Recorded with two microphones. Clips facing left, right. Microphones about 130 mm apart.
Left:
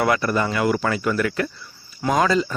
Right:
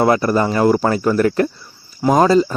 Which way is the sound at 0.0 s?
30° right (ahead or behind).